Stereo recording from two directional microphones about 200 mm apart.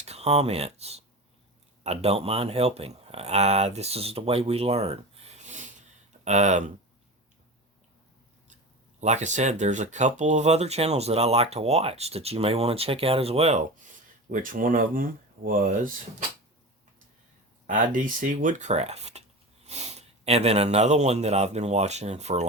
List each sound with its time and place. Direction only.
0.0 s speech: 30° right (ahead or behind)
9.0 s speech: 35° right (ahead or behind)
17.7 s speech: 40° right (ahead or behind)